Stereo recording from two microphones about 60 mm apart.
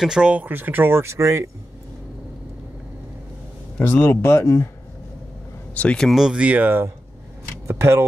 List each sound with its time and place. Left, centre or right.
0.0 s speech: centre
0.3 s speech: right
3.9 s speech: left
5.8 s speech: centre
6.3 s speech: right
7.6 s speech: right